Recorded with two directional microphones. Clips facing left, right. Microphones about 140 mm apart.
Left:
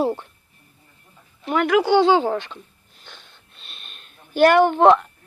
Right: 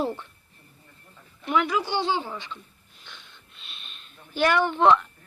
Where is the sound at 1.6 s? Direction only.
85° left.